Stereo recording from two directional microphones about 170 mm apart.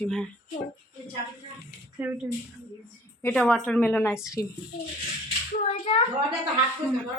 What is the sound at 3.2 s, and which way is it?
A woman's voice, 10° left (ahead or behind).